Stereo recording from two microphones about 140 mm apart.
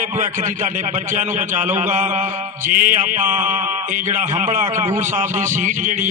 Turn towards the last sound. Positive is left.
turn(degrees=-65)  # may be behind; listen again after turning